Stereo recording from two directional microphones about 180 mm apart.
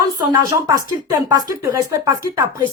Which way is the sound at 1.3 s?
20° right (ahead or behind).